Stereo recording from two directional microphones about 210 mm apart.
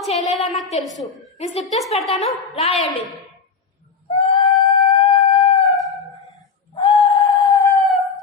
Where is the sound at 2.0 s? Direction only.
30° left (ahead or behind).